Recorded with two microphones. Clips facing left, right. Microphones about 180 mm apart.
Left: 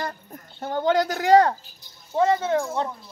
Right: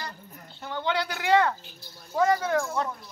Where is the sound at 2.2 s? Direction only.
25° left (ahead or behind).